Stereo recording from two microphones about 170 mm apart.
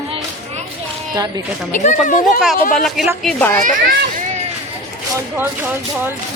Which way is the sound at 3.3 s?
10° left (ahead or behind).